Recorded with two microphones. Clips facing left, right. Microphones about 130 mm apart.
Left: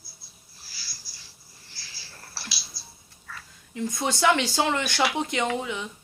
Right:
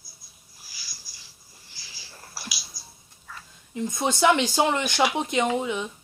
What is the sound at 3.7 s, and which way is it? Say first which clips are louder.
Speech: right 2 dB; 20° right (ahead or behind).